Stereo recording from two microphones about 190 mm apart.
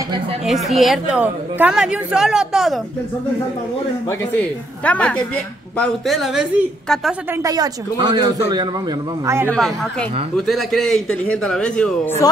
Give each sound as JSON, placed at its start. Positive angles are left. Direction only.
{"t": 0.5, "sound": "speech", "side_deg": 0}
{"t": 4.1, "sound": "speech", "side_deg": 10}
{"t": 7.4, "sound": "speech", "side_deg": -20}
{"t": 9.5, "sound": "speech", "side_deg": 5}